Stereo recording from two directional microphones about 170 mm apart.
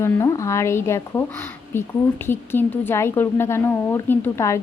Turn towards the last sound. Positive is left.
turn(degrees=15)  # may be behind; listen again after turning